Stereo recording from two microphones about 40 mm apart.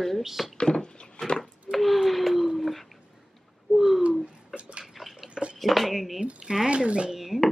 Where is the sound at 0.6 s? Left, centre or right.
Centre.